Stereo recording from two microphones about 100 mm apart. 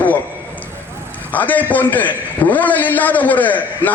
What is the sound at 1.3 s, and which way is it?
Speech, 15° left (ahead or behind).